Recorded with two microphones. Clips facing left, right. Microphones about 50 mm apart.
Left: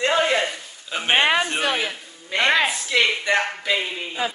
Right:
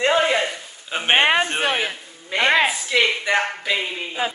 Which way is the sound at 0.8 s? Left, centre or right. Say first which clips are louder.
Right 2 dB; right.